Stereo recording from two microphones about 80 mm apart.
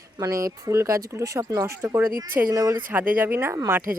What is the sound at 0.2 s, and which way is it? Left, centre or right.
Speech, right.